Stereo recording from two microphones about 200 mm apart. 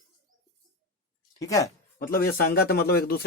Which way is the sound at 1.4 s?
15° left (ahead or behind).